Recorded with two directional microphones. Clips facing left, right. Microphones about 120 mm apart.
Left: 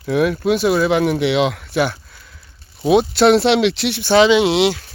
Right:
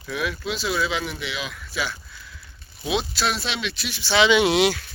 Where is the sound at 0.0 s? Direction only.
55° left (ahead or behind).